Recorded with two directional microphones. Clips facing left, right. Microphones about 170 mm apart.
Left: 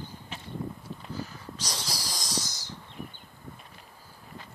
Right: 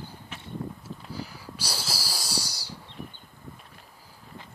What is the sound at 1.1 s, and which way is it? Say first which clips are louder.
Wheeze: left 1 dB; 10° right (ahead or behind).